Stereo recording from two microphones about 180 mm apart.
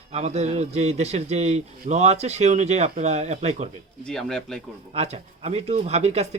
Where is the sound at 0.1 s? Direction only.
35° right (ahead or behind).